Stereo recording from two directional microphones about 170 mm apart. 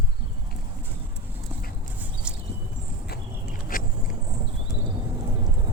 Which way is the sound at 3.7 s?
55° left (ahead or behind).